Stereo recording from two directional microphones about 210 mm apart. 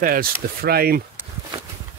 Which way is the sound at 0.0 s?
45° right (ahead or behind).